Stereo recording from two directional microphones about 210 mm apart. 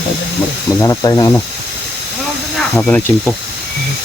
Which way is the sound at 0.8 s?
15° left (ahead or behind).